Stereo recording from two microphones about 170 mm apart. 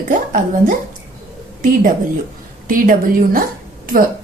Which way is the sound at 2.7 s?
55° right (ahead or behind).